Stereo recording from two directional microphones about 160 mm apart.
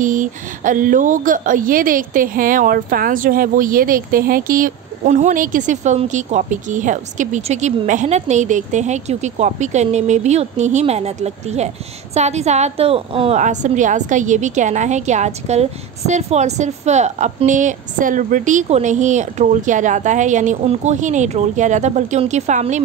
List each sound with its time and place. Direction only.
0.0 s a woman's voice: 55° right (ahead or behind); by 13.4 s 35° right (ahead or behind)
13.4 s a woman's voice: 50° right (ahead or behind)